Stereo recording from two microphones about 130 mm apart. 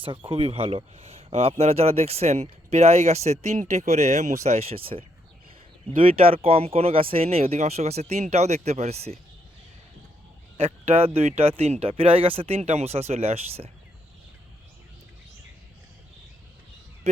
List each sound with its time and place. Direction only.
0.0 s speech: 40° right (ahead or behind); by 4.4 s 65° right (ahead or behind)
4.4 s speech: 50° right (ahead or behind)
10.6 s speech: 50° right (ahead or behind)